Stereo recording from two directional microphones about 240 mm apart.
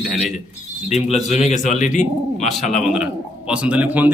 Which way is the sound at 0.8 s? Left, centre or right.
Left.